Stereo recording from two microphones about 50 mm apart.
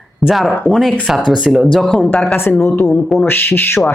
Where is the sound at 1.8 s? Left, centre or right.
Centre.